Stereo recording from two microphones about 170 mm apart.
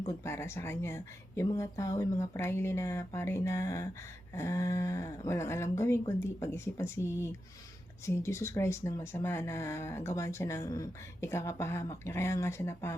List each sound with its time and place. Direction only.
0.0 s speech: 15° left (ahead or behind)